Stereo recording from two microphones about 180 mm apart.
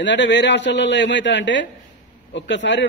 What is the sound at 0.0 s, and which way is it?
A man's voice, 80° left.